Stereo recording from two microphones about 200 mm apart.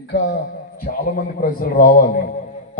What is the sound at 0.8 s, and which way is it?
A man's voice, 45° left (ahead or behind).